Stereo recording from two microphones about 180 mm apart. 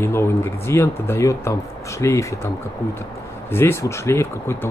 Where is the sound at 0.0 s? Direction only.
15° left (ahead or behind).